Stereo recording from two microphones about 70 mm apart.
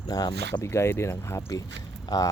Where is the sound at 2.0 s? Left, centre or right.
Left.